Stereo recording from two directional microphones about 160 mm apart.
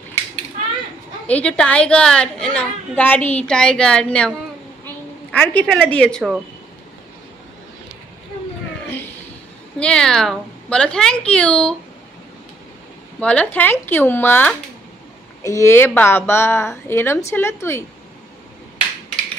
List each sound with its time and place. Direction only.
1.2 s a woman's voice: 10° left (ahead or behind)
5.3 s a woman's voice: 10° left (ahead or behind)
8.8 s a sound: 10° left (ahead or behind)
9.8 s speech: 5° left (ahead or behind)
13.2 s a woman's voice: 10° left (ahead or behind)